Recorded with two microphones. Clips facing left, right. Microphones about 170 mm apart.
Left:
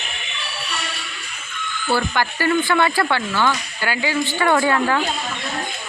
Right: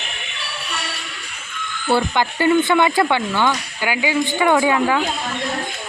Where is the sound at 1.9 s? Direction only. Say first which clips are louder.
Right 3 dB; 20° right (ahead or behind).